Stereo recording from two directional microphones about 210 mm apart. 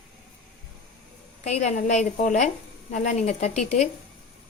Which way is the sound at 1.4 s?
35° left (ahead or behind).